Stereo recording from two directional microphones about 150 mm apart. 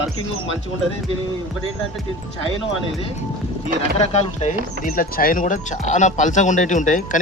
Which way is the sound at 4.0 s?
50° left (ahead or behind).